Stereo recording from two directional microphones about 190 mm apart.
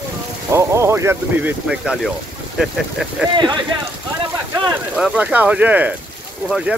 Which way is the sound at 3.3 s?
25° right (ahead or behind).